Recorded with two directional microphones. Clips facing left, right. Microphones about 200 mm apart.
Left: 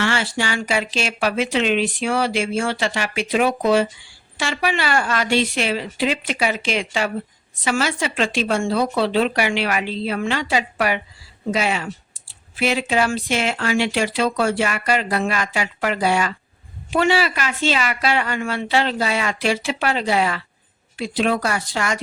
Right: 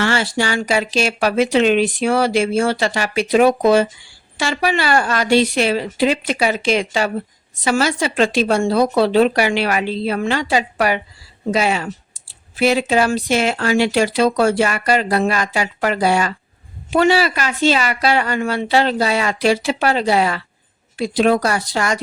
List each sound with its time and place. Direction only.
0.0 s speech: 40° right (ahead or behind)